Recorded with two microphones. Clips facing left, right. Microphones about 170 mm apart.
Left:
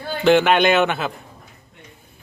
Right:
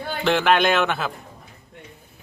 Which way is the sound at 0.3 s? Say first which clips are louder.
Left 4 dB; centre (ahead or behind).